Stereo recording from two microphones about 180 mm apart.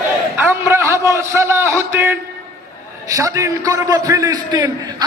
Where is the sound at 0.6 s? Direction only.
15° right (ahead or behind).